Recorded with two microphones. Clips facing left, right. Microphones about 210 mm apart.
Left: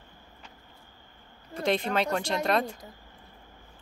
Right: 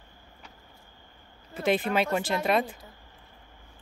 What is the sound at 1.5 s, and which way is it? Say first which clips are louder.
Speech: right 1 dB; 5° right (ahead or behind).